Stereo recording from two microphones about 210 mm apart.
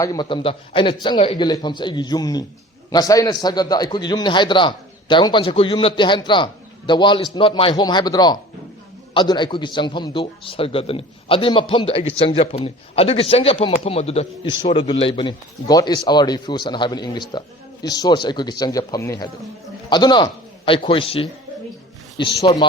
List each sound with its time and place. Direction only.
0.0 s a man's voice: 20° left (ahead or behind)